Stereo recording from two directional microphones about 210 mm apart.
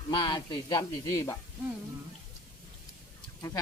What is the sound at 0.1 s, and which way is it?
Speech, 20° left (ahead or behind).